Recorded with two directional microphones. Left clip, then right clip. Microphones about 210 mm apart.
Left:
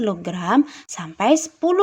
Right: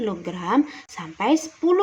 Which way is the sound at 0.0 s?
35° left (ahead or behind).